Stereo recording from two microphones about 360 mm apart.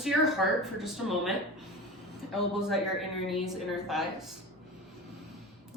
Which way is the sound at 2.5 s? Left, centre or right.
Centre.